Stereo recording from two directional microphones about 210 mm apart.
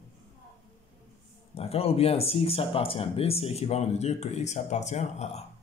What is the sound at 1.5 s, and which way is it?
Speech, 30° left (ahead or behind).